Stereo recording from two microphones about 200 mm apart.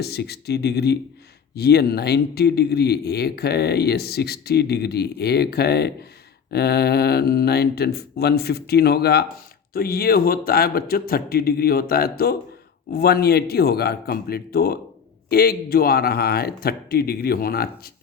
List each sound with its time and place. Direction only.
0.0 s speech: 55° left (ahead or behind)